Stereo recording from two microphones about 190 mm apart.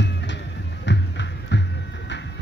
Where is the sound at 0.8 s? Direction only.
70° left (ahead or behind).